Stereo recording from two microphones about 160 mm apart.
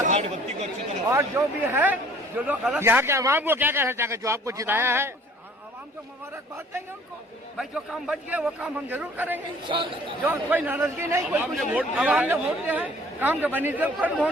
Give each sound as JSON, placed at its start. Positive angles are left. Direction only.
{"t": 0.0, "sound": "chatter", "side_deg": -45}
{"t": 1.1, "sound": "a man's voice", "side_deg": -15}
{"t": 7.5, "sound": "a man's voice", "side_deg": 0}
{"t": 9.6, "sound": "speech", "side_deg": -30}
{"t": 10.2, "sound": "a man's voice", "side_deg": -10}